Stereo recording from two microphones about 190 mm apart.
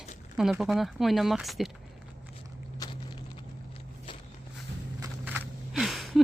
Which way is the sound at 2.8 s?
25° left (ahead or behind).